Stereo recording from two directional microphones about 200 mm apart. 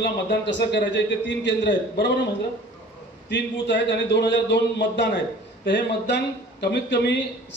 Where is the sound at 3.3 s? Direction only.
65° left (ahead or behind).